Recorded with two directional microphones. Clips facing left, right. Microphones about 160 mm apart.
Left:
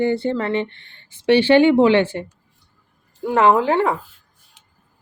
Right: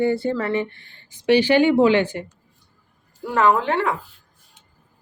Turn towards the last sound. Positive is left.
turn(degrees=25)  # may be behind; listen again after turning